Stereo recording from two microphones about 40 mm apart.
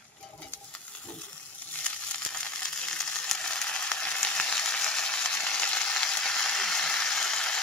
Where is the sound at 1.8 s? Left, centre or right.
Left.